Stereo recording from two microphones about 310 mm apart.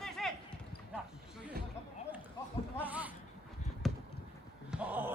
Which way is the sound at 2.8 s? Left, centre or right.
Centre.